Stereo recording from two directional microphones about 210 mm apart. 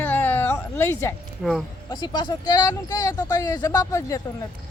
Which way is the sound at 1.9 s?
20° left (ahead or behind).